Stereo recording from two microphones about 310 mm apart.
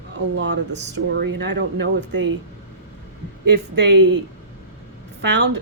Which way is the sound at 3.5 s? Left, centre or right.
Right.